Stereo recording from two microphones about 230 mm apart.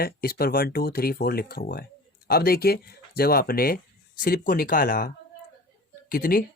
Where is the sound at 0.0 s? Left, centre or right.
Left.